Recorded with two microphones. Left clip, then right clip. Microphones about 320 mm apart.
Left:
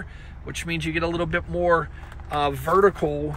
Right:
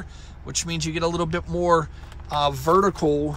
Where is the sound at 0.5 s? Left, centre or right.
Centre.